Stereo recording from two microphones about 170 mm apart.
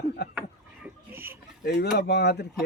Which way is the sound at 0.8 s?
15° right (ahead or behind).